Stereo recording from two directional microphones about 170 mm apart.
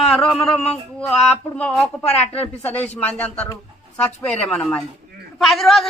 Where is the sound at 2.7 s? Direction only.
10° left (ahead or behind).